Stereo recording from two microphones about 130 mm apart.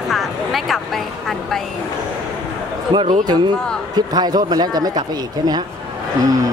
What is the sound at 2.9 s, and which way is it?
A man's voice, 35° right (ahead or behind).